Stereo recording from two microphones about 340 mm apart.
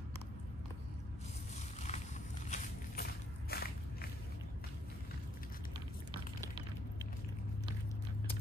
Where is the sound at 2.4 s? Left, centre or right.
Left.